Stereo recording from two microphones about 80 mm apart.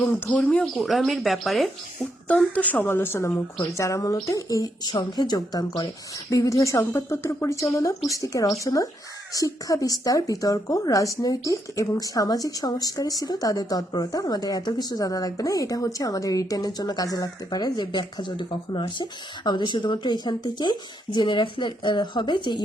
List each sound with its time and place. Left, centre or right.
0.3 s speech: centre
0.6 s speech: centre
2.0 s speech: centre; by 5.9 s left
6.3 s speech: left